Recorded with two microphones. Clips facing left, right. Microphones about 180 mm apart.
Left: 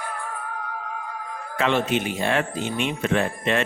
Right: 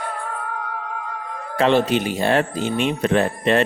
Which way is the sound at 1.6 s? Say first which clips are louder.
Right 5 dB; 35° right (ahead or behind).